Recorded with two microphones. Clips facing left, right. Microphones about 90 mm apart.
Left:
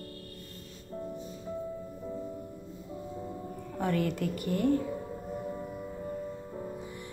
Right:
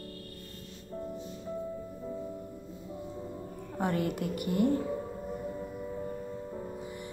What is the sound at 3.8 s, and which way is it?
Speech, 20° right (ahead or behind).